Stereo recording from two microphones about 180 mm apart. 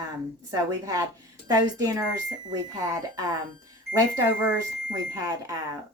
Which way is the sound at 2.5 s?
20° right (ahead or behind).